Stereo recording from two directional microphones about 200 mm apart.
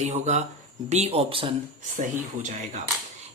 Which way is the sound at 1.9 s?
40° right (ahead or behind).